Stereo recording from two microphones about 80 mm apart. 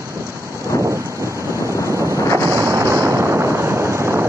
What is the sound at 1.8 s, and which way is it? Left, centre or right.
Wind noise, right.